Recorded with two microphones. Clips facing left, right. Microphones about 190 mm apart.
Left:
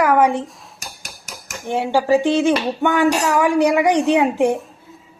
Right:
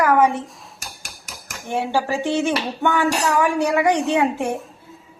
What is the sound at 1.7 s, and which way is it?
A woman's voice, 15° left (ahead or behind).